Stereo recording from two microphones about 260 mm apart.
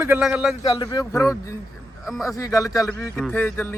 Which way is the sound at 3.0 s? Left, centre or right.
Centre.